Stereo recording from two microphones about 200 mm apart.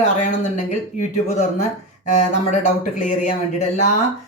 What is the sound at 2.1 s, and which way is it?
Speech, 35° left (ahead or behind).